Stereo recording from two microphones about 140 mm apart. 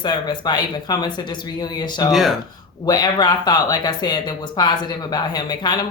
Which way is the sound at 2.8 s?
30° left (ahead or behind).